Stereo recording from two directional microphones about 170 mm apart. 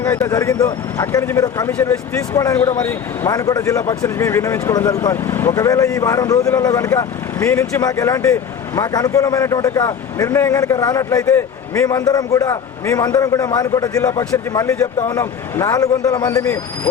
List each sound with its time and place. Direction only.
0.0 s a man's voice: 20° left (ahead or behind)